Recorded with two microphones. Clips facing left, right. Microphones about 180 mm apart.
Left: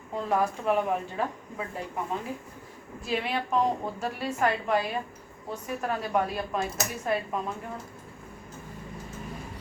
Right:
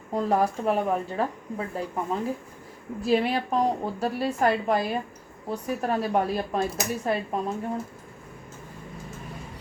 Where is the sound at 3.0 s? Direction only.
35° right (ahead or behind).